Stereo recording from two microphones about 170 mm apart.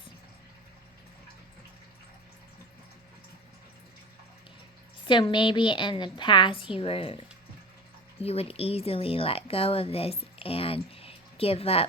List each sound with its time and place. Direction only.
5.0 s a woman's voice: 30° left (ahead or behind)
8.2 s speech: 35° left (ahead or behind)